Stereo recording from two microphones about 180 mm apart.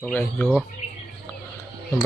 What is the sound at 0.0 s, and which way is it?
Speech, 10° left (ahead or behind).